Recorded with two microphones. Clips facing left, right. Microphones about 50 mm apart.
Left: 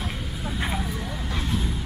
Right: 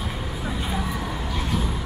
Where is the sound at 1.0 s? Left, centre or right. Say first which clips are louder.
Right 2 dB; right.